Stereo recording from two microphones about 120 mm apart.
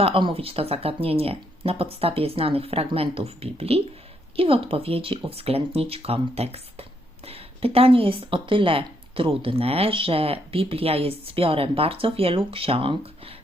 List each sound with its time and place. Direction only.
0.0 s speech: 45° right (ahead or behind)